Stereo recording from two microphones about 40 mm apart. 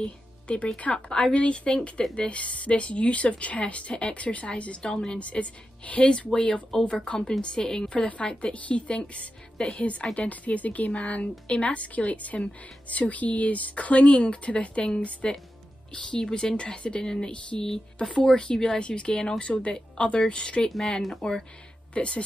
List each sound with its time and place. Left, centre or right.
0.0 s speech: left
4.8 s speech: centre
5.2 s speech: left
16.3 s speech: centre
16.5 s speech: left
17.0 s speech: centre
20.6 s speech: centre
21.9 s speech: left